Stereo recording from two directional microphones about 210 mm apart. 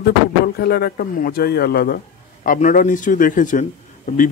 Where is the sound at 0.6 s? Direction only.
45° left (ahead or behind).